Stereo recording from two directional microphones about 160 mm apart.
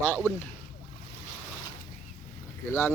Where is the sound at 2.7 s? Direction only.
10° left (ahead or behind).